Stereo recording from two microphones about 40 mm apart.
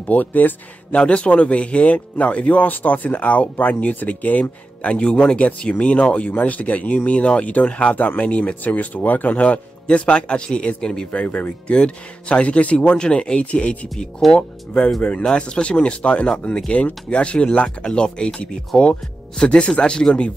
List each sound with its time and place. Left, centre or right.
0.0 s speech: left
0.9 s speech: left
4.8 s speech: left
9.8 s speech: left
11.1 s speech: left
11.6 s speech: left